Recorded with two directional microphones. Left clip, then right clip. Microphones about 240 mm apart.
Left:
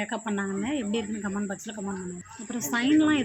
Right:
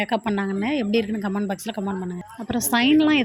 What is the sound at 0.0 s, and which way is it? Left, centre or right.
A woman's voice, right.